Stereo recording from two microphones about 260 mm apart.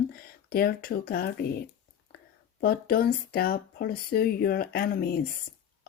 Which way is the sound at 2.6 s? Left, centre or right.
Left.